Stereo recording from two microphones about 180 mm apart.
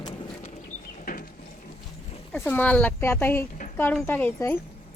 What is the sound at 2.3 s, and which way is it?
Speech, 10° left (ahead or behind).